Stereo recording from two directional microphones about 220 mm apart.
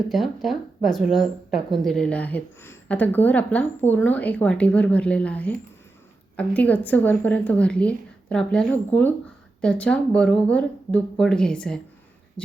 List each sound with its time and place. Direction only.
0.1 s speech: centre (ahead or behind)